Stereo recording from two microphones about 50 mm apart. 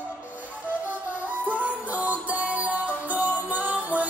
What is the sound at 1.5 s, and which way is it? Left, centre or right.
Music, right.